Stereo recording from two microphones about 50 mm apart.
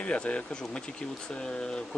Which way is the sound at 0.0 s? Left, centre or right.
Left.